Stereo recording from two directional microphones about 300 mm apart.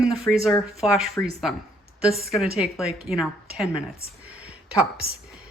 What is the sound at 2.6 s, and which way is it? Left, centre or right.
Speech, centre.